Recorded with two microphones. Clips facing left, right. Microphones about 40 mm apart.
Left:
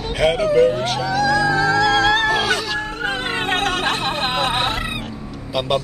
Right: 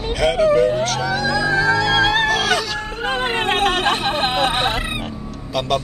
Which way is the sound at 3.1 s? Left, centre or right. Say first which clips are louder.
Right 4 dB; centre.